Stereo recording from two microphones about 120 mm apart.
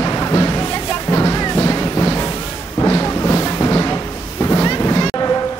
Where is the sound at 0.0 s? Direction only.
30° left (ahead or behind).